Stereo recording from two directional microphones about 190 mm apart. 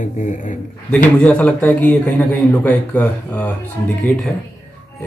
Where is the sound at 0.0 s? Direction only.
40° left (ahead or behind).